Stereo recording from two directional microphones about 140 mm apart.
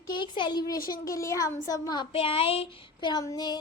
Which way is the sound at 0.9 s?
25° left (ahead or behind).